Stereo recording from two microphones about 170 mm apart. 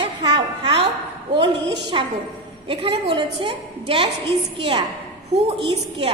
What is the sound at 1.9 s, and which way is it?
A woman's voice, 30° right (ahead or behind).